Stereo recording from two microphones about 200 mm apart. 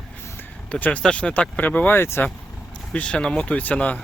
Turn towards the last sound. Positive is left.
turn(degrees=5)  # may be behind; listen again after turning